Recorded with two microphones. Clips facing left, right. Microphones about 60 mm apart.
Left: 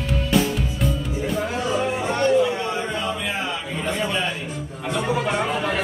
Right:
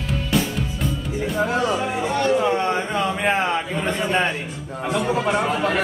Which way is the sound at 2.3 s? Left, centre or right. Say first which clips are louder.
Right 1 dB; right.